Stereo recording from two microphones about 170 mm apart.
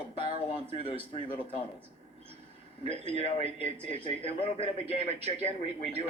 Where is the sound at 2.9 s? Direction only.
35° left (ahead or behind).